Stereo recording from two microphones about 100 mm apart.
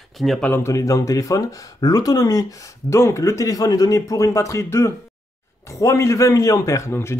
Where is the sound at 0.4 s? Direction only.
20° left (ahead or behind).